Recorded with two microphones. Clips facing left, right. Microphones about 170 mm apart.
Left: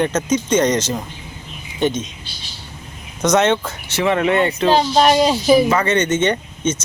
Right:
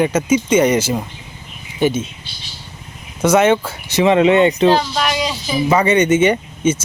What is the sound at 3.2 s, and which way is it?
Speech, 5° right (ahead or behind).